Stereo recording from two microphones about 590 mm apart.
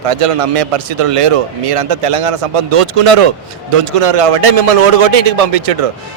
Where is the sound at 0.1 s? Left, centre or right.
Right.